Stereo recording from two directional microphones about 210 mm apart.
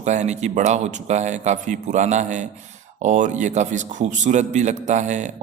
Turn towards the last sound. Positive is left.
turn(degrees=-35)  # may be behind; listen again after turning